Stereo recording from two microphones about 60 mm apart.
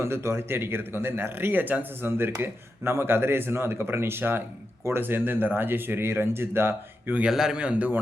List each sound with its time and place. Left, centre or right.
0.0 s speech: right
7.3 s a man's voice: centre